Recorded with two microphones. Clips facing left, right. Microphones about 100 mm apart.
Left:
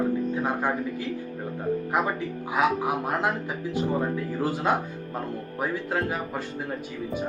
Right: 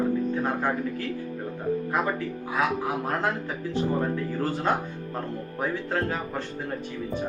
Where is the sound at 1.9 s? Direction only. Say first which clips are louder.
Left 1 dB; 20° left (ahead or behind).